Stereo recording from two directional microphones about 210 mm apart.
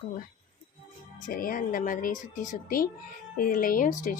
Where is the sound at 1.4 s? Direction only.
40° left (ahead or behind).